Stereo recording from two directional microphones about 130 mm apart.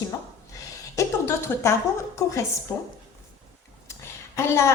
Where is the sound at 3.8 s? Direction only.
20° left (ahead or behind).